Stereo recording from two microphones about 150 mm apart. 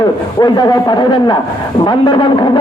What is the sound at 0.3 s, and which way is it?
A man's voice, 25° left (ahead or behind).